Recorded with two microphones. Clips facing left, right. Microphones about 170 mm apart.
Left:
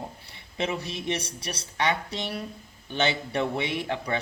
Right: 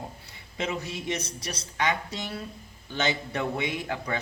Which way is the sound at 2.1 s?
15° left (ahead or behind).